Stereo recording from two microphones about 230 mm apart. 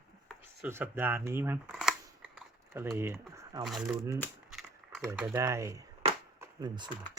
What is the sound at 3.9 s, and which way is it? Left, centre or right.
Speech, centre.